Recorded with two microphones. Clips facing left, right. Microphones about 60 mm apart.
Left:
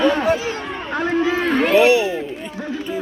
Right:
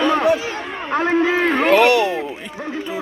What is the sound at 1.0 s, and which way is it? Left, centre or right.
Speech, right.